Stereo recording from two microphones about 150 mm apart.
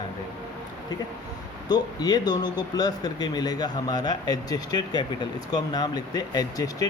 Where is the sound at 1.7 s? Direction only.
25° left (ahead or behind).